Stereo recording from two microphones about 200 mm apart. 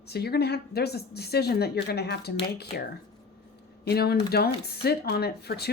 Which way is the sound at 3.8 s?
50° left (ahead or behind).